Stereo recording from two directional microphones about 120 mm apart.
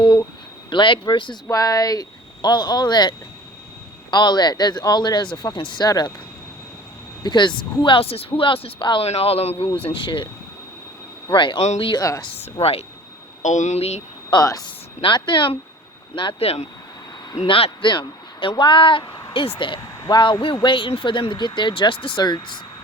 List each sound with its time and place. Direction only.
0.0 s speech: 35° left (ahead or behind)
1.5 s speech: 30° left (ahead or behind)
7.2 s speech: 40° left (ahead or behind)
11.3 s speech: 40° left (ahead or behind)
11.6 s speech: 65° left (ahead or behind)
11.9 s speech: 30° left (ahead or behind)
12.2 s speech: 55° left (ahead or behind)
13.4 s speech: 80° left; by 14.0 s 65° left (ahead or behind)
14.4 s speech: 30° left (ahead or behind)
15.0 s speech: 45° left (ahead or behind)